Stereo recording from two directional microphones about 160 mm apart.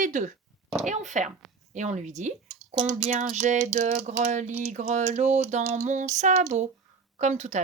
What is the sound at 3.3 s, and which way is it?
Speech, 45° right (ahead or behind).